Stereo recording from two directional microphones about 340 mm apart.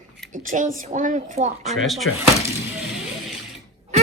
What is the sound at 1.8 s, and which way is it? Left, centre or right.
Speech, centre.